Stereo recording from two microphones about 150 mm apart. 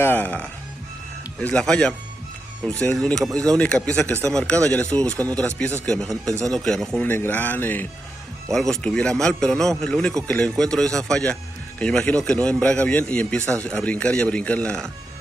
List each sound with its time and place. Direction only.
0.0 s a man's voice: 15° left (ahead or behind)
6.3 s speech: 25° right (ahead or behind)
6.6 s a man's voice: 5° left (ahead or behind)